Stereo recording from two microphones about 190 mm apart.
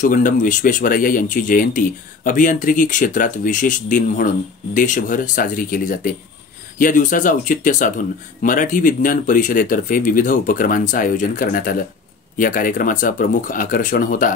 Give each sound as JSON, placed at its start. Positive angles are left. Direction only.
{"t": 0.0, "sound": "speech", "side_deg": 45}